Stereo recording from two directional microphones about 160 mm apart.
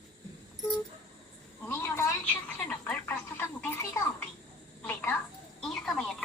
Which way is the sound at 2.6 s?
10° left (ahead or behind).